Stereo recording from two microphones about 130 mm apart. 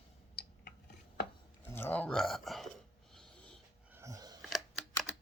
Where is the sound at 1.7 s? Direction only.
15° left (ahead or behind).